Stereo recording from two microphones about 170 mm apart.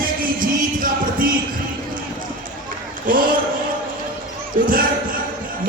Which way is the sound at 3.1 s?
55° right (ahead or behind).